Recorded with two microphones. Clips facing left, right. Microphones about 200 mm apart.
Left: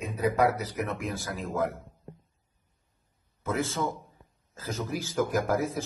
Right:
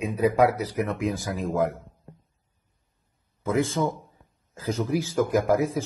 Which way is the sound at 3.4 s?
15° right (ahead or behind).